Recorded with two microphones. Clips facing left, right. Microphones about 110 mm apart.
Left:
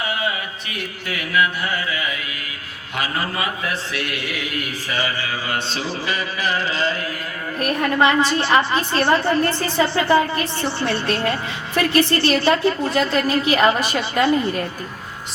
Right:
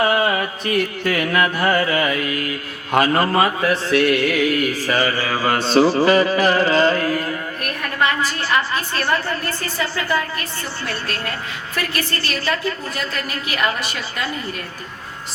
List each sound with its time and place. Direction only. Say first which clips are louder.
0.0 s music: right 7 dB; 50° right (ahead or behind)
7.6 s a woman's voice: left 5 dB; 25° left (ahead or behind)